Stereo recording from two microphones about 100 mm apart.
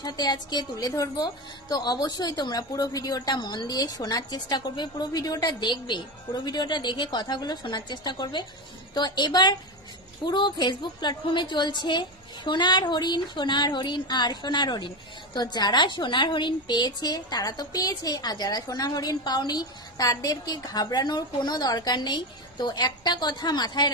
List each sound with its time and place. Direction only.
0.0 s a woman's voice: 45° left (ahead or behind)